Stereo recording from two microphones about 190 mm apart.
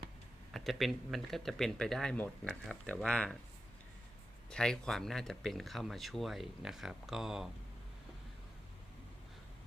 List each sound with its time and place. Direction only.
0.5 s speech: centre (ahead or behind)
4.4 s speech: 5° left (ahead or behind)